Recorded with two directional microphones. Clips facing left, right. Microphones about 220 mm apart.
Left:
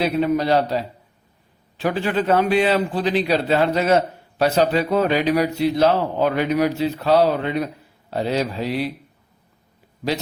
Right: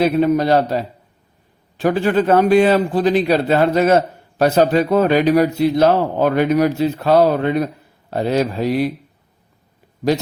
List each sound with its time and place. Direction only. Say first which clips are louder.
0.0 s a man's voice: right 5 dB; 45° right (ahead or behind)